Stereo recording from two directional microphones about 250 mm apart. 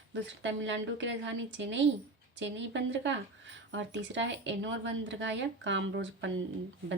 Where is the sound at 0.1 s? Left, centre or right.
Right.